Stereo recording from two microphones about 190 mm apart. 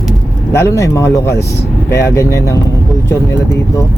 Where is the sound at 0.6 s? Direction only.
15° left (ahead or behind).